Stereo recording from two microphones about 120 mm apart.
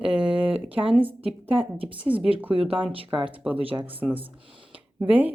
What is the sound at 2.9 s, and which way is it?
Speech, 45° right (ahead or behind).